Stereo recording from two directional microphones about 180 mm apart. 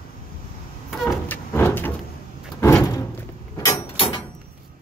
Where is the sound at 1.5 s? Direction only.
10° left (ahead or behind).